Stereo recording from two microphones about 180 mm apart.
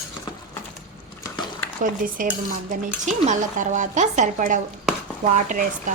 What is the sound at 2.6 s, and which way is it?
Speech, 45° right (ahead or behind).